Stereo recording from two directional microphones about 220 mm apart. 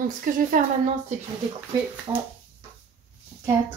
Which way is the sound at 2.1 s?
20° right (ahead or behind).